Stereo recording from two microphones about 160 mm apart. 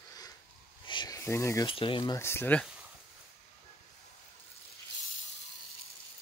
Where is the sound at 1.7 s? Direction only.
30° left (ahead or behind).